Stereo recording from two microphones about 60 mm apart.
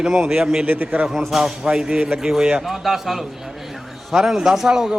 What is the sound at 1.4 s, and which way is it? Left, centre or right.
A man's voice, centre.